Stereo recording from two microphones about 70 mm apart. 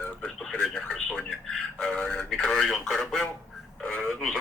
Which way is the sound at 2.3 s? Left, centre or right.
Centre.